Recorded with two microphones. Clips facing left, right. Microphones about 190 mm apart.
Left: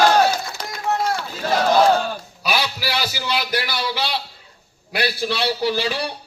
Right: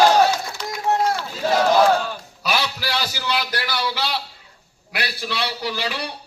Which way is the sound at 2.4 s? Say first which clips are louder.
Left 1 dB; centre (ahead or behind).